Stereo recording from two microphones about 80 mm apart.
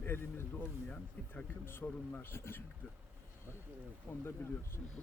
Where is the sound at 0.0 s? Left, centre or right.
Left.